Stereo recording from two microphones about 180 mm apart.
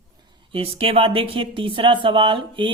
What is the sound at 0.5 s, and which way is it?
Speech, 30° right (ahead or behind).